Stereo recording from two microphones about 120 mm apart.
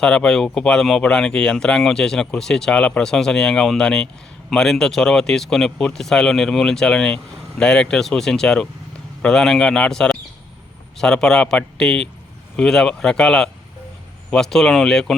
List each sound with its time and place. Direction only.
0.0 s speech: 5° left (ahead or behind)